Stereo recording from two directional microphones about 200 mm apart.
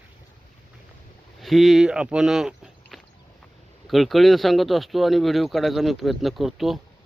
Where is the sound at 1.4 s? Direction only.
Centre (ahead or behind).